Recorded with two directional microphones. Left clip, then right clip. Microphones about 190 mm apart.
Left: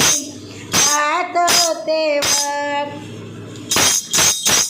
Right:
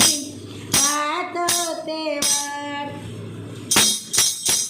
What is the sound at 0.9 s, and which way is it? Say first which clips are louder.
Music: left 7 dB; 10° right (ahead or behind).